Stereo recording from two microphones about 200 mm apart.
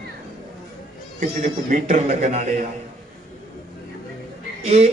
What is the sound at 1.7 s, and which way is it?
Speech, 40° right (ahead or behind).